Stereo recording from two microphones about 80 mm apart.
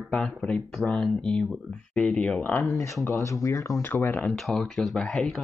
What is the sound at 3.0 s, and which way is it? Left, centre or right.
Speech, left.